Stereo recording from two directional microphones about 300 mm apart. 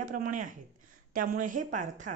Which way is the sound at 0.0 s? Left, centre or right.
Right.